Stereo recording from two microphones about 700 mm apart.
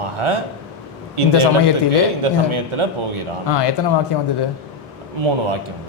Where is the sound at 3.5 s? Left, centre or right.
Left.